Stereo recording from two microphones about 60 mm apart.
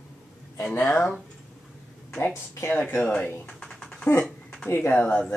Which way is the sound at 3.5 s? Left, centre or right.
Centre.